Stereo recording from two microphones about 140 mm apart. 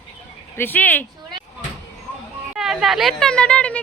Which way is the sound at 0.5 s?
15° left (ahead or behind).